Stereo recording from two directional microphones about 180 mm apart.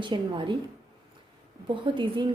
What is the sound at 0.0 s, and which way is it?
Speech, 25° right (ahead or behind).